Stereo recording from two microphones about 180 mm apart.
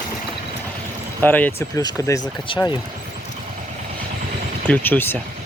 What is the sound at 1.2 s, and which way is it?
Speech, 10° left (ahead or behind).